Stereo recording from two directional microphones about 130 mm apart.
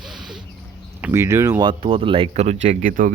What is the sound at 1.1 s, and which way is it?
Speech, 20° right (ahead or behind).